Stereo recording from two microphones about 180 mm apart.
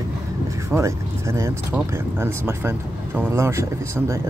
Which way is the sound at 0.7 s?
15° right (ahead or behind).